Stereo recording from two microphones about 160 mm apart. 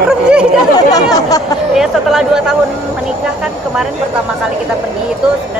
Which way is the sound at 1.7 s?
5° right (ahead or behind).